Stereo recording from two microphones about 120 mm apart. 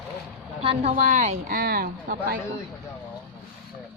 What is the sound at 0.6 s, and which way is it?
Speech, 55° right (ahead or behind).